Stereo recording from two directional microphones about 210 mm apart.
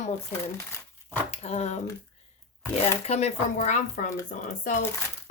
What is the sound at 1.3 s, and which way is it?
Speech, 30° left (ahead or behind).